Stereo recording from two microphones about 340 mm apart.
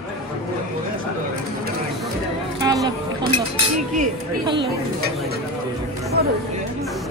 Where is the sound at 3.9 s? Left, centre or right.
Centre.